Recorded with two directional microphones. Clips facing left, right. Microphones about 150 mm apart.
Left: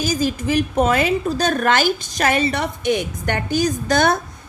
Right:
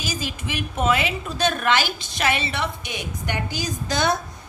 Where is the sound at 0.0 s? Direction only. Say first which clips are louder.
Left 9 dB; 45° left (ahead or behind).